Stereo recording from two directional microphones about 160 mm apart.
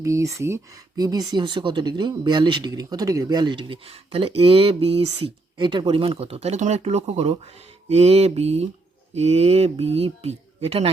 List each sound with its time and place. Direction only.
0.0 s speech: 20° right (ahead or behind); by 10.9 s 40° right (ahead or behind)